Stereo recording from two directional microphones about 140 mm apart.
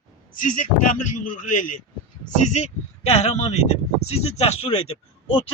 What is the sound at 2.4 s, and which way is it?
Speech, 55° left (ahead or behind).